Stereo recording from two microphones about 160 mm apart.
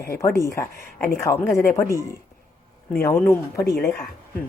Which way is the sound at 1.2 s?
15° left (ahead or behind).